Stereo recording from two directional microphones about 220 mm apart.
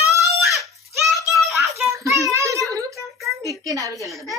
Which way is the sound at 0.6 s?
Centre (ahead or behind).